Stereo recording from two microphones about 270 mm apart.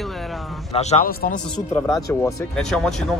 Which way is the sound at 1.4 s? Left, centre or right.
Centre.